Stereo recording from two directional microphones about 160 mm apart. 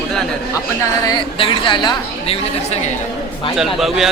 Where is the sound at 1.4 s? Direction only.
30° left (ahead or behind).